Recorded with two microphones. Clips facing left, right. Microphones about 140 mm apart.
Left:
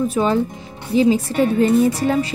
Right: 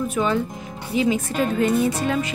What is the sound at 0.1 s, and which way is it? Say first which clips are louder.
Speech: left 4 dB; 35° left (ahead or behind).